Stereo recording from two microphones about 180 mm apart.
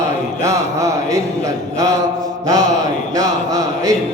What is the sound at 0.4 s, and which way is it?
Mantra, 20° right (ahead or behind).